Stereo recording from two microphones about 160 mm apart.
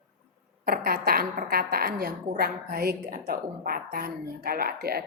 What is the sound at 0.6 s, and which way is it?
A woman's voice, 70° right (ahead or behind).